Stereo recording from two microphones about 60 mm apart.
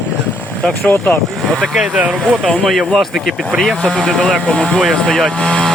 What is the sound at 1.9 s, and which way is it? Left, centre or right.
Speech, right.